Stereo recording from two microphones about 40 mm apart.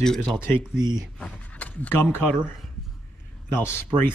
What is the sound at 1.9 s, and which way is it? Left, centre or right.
Speech, left.